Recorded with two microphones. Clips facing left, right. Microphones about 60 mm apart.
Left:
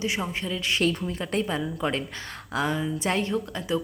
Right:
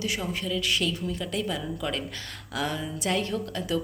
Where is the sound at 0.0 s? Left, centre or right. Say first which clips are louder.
Left 2 dB; left.